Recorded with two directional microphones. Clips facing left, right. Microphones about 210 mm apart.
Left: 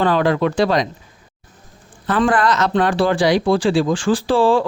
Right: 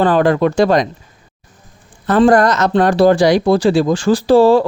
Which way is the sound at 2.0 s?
45° right (ahead or behind).